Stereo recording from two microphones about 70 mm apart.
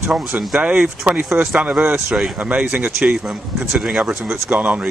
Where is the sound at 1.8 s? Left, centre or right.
Right.